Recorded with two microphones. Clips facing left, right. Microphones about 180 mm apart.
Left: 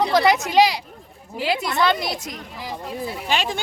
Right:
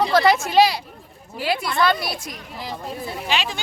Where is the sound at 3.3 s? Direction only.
50° left (ahead or behind).